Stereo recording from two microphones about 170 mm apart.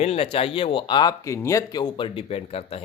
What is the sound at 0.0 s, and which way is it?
Speech, 35° left (ahead or behind).